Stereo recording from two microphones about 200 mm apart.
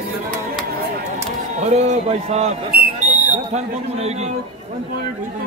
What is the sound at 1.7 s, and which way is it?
Speech, 35° right (ahead or behind).